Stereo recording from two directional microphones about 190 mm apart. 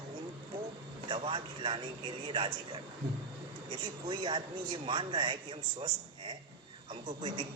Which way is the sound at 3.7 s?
25° right (ahead or behind).